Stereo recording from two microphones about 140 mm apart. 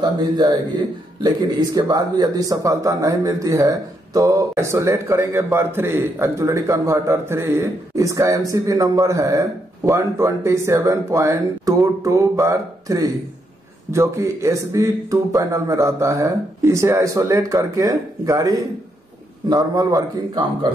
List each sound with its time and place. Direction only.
0.0 s a man's voice: 30° right (ahead or behind)
1.9 s a man's voice: 30° right (ahead or behind)